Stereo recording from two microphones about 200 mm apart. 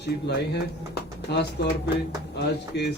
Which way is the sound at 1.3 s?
60° left (ahead or behind).